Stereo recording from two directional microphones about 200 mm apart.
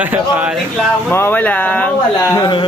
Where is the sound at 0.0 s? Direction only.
10° right (ahead or behind).